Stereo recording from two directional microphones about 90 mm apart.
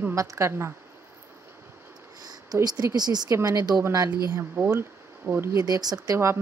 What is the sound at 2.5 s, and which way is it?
Speech, 45° right (ahead or behind).